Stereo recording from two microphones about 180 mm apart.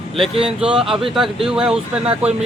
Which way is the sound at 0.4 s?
5° right (ahead or behind).